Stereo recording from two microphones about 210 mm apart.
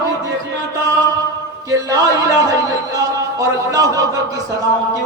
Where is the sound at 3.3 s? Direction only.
15° right (ahead or behind).